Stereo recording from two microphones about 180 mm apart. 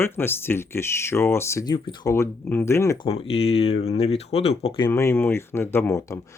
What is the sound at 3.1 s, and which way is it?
Speech, 35° left (ahead or behind).